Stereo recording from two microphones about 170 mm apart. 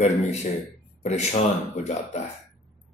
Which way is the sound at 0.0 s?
40° left (ahead or behind).